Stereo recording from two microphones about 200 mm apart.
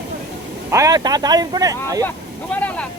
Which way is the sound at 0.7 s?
15° right (ahead or behind).